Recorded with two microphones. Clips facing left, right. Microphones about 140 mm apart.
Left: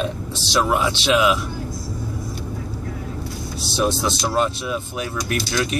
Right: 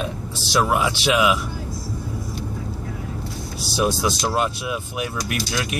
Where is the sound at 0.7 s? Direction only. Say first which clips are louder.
Left 1 dB; 10° right (ahead or behind).